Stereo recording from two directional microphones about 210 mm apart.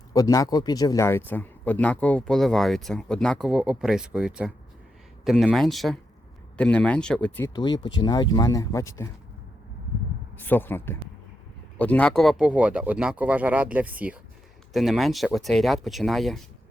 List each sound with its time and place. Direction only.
0.1 s speech: 15° left (ahead or behind)
7.5 s speech: 20° left (ahead or behind)
10.3 s speech: 10° left (ahead or behind)